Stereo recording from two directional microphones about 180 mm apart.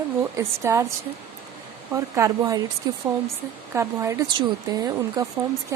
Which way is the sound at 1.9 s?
15° right (ahead or behind).